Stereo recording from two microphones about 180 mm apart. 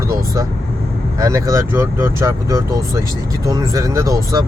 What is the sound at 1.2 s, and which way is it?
Speech, 20° right (ahead or behind).